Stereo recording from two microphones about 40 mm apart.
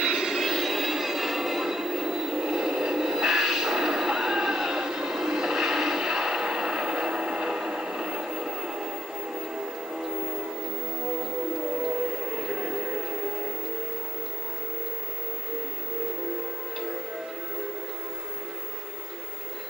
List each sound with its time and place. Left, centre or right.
0.0 s train: centre
11.8 s train: centre